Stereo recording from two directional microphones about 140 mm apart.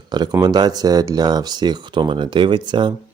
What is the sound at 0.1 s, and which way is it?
Speech, 30° right (ahead or behind).